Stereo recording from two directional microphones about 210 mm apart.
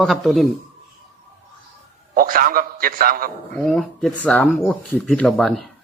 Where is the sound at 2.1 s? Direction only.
40° right (ahead or behind).